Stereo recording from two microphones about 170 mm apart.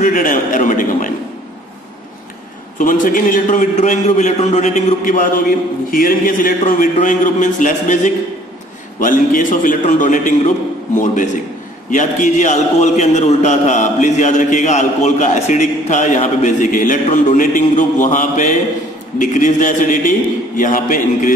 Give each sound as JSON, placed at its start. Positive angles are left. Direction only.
{"t": 0.0, "sound": "a man's voice", "side_deg": 50}
{"t": 2.8, "sound": "a man's voice", "side_deg": 55}
{"t": 11.9, "sound": "a man's voice", "side_deg": 50}